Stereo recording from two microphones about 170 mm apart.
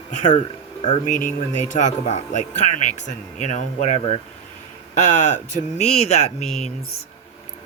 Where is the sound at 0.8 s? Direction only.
50° left (ahead or behind).